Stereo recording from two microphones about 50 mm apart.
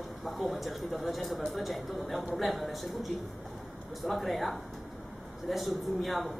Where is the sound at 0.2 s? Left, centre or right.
Centre.